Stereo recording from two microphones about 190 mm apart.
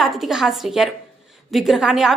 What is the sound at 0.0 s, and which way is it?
A woman's voice, centre (ahead or behind).